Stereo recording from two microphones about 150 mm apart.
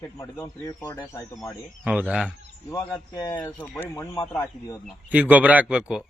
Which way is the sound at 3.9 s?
25° left (ahead or behind).